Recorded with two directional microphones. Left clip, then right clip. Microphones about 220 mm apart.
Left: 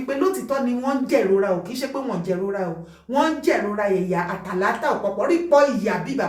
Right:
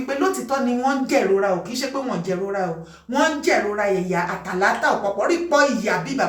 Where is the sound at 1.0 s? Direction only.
Centre (ahead or behind).